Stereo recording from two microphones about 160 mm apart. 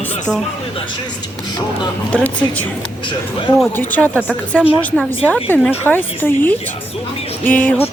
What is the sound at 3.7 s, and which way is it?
A woman's voice, 10° left (ahead or behind).